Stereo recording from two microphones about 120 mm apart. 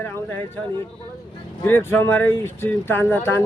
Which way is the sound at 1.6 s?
20° left (ahead or behind).